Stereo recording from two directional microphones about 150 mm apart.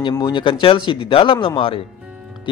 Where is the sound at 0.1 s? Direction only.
30° left (ahead or behind).